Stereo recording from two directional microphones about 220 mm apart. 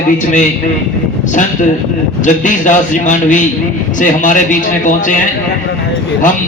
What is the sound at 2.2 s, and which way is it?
A man's voice, 35° left (ahead or behind).